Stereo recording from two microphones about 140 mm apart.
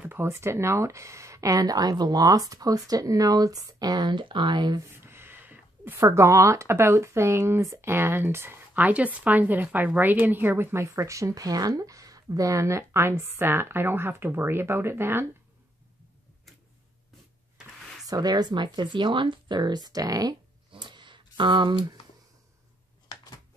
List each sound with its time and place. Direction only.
0.0 s speech: 15° right (ahead or behind); by 4.8 s 30° right (ahead or behind)
4.8 s speech: 15° right (ahead or behind)
18.0 s speech: 30° right (ahead or behind)
20.7 s a sound: 35° right (ahead or behind)